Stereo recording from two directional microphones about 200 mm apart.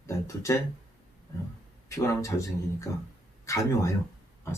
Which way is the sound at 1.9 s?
15° left (ahead or behind).